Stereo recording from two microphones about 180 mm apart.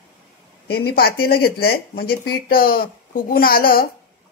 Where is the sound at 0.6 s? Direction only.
60° left (ahead or behind).